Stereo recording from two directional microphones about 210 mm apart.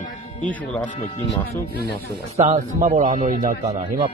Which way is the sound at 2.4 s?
35° right (ahead or behind).